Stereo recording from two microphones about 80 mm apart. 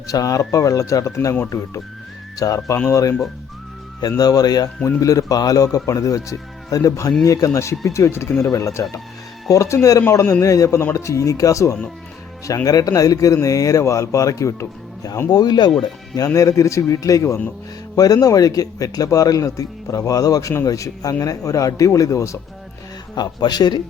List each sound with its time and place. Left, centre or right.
0.1 s a man's voice: left
4.2 s a man's voice: left
15.3 s speech: left
16.1 s a man's voice: left
23.1 s speech: left